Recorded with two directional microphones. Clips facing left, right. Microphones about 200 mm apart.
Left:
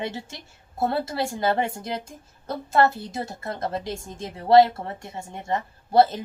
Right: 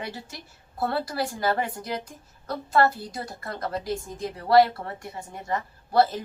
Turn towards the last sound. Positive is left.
turn(degrees=20)  # may be behind; listen again after turning